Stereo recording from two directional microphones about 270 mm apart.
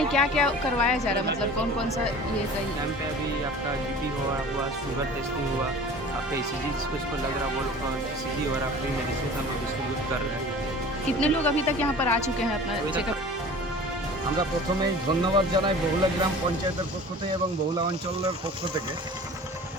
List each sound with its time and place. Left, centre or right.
0.1 s a woman's voice: centre
11.2 s speech: centre
15.2 s speech: centre